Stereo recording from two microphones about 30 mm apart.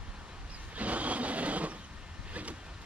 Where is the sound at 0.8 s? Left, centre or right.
Right.